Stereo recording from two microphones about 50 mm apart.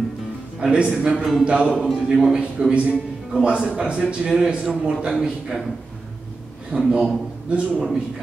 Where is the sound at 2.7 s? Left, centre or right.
Centre.